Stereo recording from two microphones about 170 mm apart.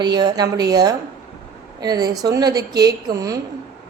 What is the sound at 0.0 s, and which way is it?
A woman's voice, 25° right (ahead or behind).